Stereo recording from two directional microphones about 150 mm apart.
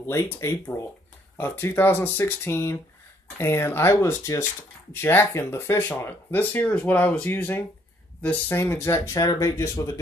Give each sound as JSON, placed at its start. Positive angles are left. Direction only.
{"t": 0.0, "sound": "speech", "side_deg": 15}